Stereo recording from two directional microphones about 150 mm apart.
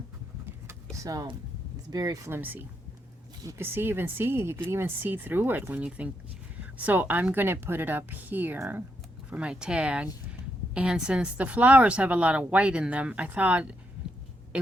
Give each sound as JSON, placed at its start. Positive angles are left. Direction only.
{"t": 1.0, "sound": "speech", "side_deg": -25}